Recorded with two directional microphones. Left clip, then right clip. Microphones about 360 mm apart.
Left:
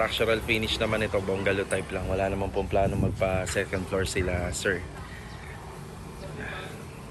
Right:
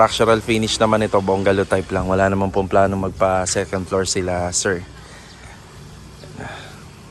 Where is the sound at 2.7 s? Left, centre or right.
Centre.